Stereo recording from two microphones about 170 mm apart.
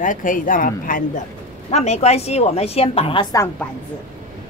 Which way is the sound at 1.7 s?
40° left (ahead or behind).